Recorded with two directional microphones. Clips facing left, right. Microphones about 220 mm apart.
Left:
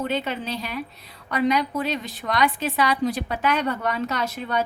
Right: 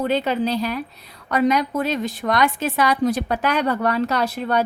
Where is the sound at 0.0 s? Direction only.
35° right (ahead or behind).